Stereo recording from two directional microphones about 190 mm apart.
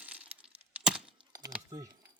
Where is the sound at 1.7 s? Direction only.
20° right (ahead or behind).